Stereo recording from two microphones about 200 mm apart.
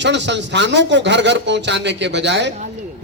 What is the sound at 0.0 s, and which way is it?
A man's voice, 60° right (ahead or behind).